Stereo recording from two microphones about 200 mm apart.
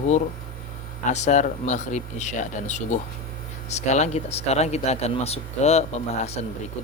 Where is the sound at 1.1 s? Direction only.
35° left (ahead or behind).